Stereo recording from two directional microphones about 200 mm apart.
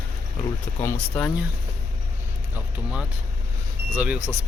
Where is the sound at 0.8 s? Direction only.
10° left (ahead or behind).